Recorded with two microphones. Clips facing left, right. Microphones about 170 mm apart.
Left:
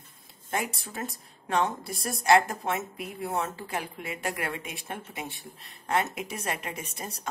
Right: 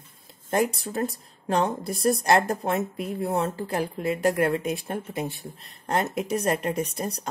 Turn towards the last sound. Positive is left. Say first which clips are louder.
# right 8 dB
turn(degrees=-35)  # may be behind; listen again after turning